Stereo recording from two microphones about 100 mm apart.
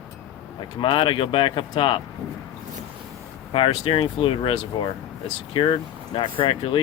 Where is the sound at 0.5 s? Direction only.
55° left (ahead or behind).